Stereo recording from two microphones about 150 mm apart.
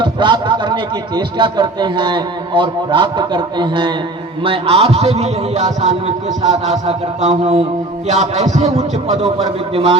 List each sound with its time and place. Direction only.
0.0 s a man's voice: 30° right (ahead or behind)